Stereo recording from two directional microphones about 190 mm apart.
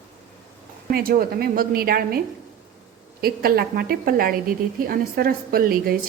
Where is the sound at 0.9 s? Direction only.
50° right (ahead or behind).